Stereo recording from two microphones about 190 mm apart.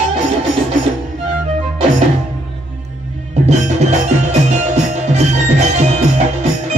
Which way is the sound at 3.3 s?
35° right (ahead or behind).